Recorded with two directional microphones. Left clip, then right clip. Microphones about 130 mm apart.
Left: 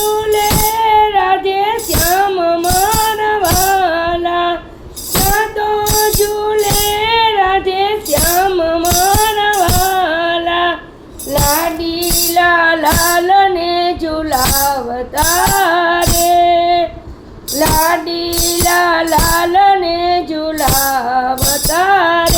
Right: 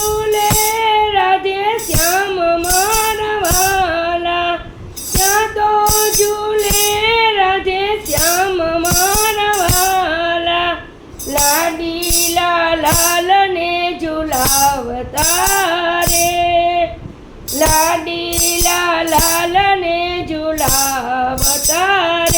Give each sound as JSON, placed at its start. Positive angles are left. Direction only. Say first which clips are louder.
{"t": 0.3, "sound": "music", "louder": "left 1 dB", "side_deg": 30}
{"t": 2.1, "sound": "child singing", "louder": "left 3 dB", "side_deg": 35}
{"t": 3.1, "sound": "music", "louder": "left 3 dB", "side_deg": 25}
{"t": 6.6, "sound": "music", "louder": "even", "side_deg": 30}
{"t": 10.4, "sound": "a sound", "louder": "left 1 dB", "side_deg": 35}
{"t": 12.3, "sound": "female singing", "louder": "left 5 dB", "side_deg": 40}
{"t": 15.5, "sound": "music", "louder": "left 3 dB", "side_deg": 35}
{"t": 18.7, "sound": "female singing", "louder": "left 4 dB", "side_deg": 35}
{"t": 21.7, "sound": "music", "louder": "left 3 dB", "side_deg": 35}